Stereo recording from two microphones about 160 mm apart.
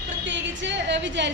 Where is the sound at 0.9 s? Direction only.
90° right.